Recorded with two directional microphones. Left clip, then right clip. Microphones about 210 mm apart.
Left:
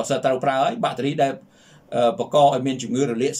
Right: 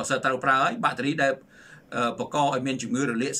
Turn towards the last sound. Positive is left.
turn(degrees=10)  # may be behind; listen again after turning